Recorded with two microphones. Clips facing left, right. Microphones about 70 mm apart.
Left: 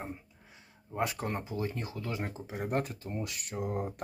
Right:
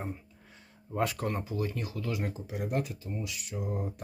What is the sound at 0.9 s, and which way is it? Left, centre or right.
Speech, left.